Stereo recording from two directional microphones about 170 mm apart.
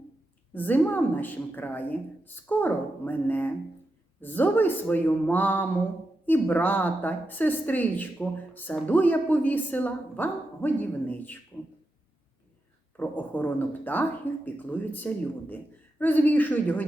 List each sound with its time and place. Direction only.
0.5 s speech: 10° left (ahead or behind)
13.0 s speech: 10° left (ahead or behind)